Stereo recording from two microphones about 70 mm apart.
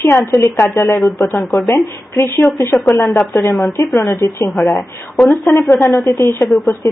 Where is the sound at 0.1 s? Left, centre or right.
Left.